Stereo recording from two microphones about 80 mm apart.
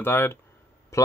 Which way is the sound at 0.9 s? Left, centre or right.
Left.